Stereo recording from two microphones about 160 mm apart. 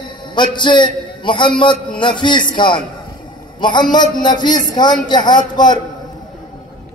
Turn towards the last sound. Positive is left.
turn(degrees=25)  # may be behind; listen again after turning